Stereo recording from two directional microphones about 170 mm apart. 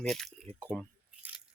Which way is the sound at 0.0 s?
5° left (ahead or behind).